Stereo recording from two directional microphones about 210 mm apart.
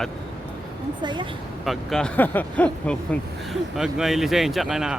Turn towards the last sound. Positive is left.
turn(degrees=0)  # may be behind; listen again after turning